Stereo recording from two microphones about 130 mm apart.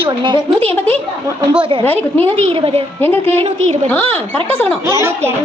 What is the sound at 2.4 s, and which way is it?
A woman's voice, 45° right (ahead or behind).